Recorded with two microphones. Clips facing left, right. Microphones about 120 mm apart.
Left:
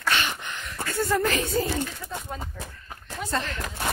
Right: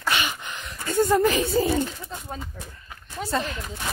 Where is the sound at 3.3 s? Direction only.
10° right (ahead or behind).